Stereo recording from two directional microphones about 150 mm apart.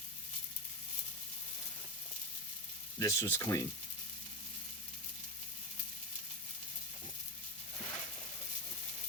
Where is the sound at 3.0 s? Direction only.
20° left (ahead or behind).